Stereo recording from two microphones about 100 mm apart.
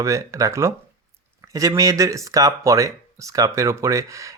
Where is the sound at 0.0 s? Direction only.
35° right (ahead or behind).